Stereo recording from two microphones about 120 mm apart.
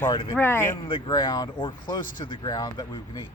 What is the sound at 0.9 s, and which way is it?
Speech, 45° left (ahead or behind).